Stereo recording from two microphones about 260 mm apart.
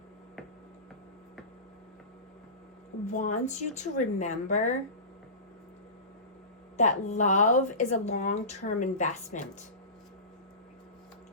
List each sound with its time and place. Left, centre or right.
3.1 s speech: left
6.7 s speech: left